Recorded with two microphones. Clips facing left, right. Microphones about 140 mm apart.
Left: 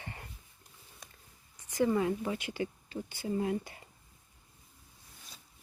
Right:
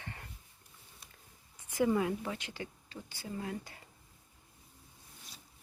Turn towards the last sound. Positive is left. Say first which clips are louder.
# left 8 dB
turn(degrees=20)  # may be behind; listen again after turning